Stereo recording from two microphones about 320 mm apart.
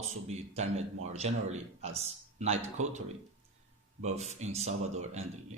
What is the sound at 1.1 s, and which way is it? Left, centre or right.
Speech, right.